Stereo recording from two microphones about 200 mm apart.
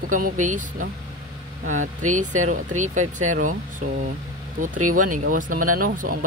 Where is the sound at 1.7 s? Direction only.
90° right.